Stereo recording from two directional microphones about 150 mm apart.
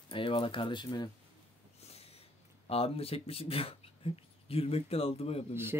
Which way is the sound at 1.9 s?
45° left (ahead or behind).